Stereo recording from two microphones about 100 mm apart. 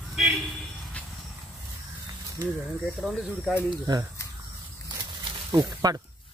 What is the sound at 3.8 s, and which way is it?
Speech, 35° right (ahead or behind).